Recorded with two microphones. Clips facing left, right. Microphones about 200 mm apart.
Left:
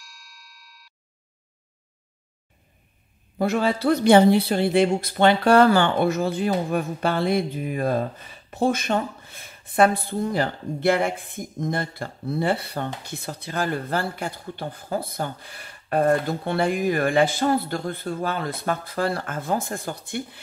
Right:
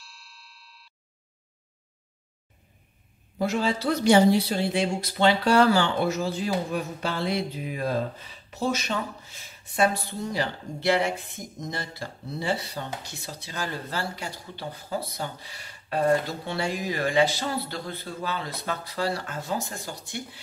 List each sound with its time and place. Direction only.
3.3 s a woman's voice: 60° left (ahead or behind)